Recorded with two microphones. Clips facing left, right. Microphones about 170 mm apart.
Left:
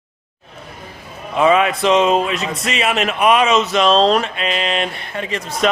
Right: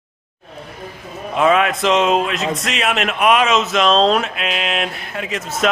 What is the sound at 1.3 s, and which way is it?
A man's voice, centre (ahead or behind).